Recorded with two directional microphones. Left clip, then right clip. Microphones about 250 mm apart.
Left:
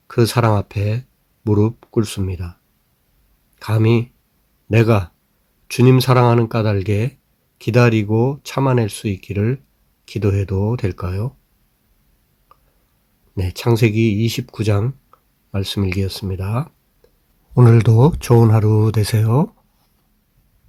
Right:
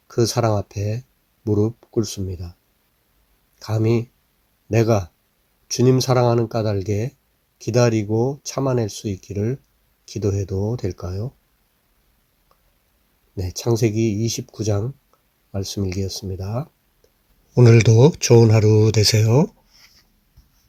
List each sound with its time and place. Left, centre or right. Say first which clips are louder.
0.1 s speech: left 3 dB; centre
3.6 s speech: left 3 dB; centre
13.3 s speech: left 3 dB; centre